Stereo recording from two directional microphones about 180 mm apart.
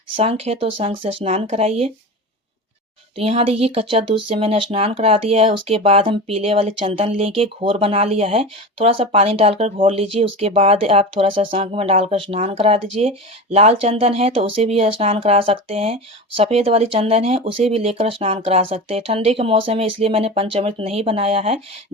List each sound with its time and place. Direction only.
0.2 s speech: 35° right (ahead or behind)
3.2 s speech: 35° right (ahead or behind)